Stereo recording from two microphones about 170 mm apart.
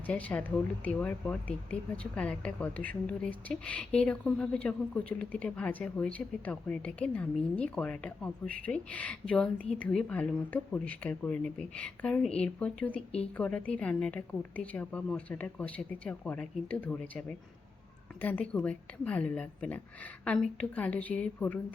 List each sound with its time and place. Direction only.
0.1 s speech: 10° left (ahead or behind)